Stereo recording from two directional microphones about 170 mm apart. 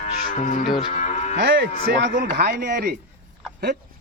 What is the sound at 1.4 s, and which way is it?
Moo, 90° right.